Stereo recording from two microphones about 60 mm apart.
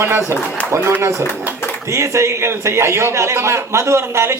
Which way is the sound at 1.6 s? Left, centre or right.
Left.